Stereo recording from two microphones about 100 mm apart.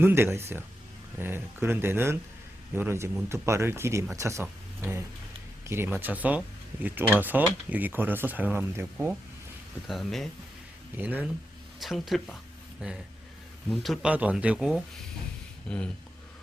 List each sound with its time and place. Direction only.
0.0 s speech: 25° right (ahead or behind)
9.8 s speech: centre (ahead or behind)
10.9 s speech: 15° right (ahead or behind)
11.8 s speech: centre (ahead or behind)
14.0 s speech: 15° right (ahead or behind)
15.7 s speech: 10° left (ahead or behind)